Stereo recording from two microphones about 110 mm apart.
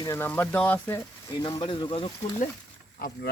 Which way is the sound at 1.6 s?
45° left (ahead or behind).